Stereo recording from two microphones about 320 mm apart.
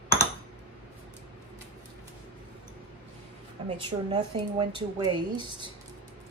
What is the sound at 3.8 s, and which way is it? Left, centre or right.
Speech, centre.